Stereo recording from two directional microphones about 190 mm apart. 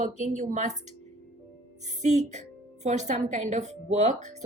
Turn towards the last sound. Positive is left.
turn(degrees=-35)  # may be behind; listen again after turning